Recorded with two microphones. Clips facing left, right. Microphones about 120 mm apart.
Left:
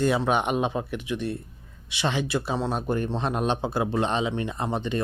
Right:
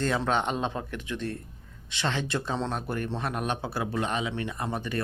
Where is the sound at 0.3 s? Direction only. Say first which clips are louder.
Left 3 dB; 15° left (ahead or behind).